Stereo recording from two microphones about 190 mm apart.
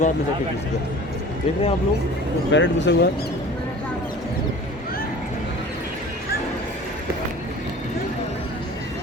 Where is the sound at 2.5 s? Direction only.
70° left (ahead or behind).